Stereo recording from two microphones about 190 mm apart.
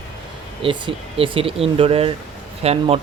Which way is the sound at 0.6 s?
30° right (ahead or behind).